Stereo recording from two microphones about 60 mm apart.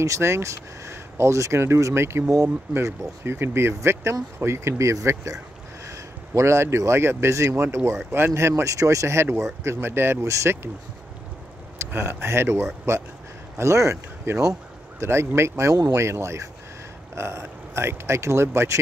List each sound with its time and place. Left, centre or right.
0.0 s speech: right
2.2 s speech: right
2.7 s speech: right
5.0 s speech: right
5.9 s a sound: right
6.9 s speech: right
10.2 s speech: right
11.9 s speech: right
15.0 s speech: right
15.7 s speech: right
16.0 s speech: right